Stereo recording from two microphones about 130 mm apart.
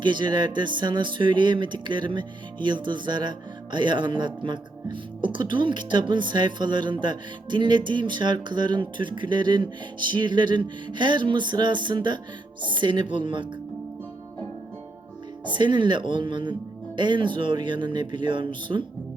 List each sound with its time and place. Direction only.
0.0 s speech: 35° right (ahead or behind)
15.4 s speech: 35° right (ahead or behind)